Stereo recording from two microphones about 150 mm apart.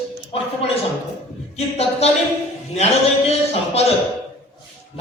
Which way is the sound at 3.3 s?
45° left (ahead or behind).